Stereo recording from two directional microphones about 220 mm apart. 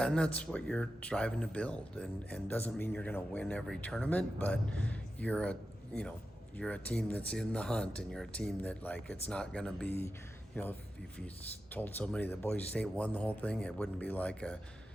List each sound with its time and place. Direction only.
0.0 s speech: 5° left (ahead or behind)